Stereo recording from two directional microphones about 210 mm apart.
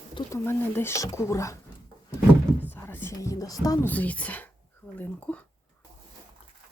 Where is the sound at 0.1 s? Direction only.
25° left (ahead or behind).